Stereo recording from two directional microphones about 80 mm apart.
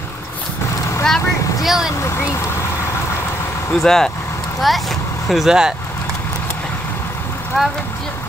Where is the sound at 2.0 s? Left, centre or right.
Left.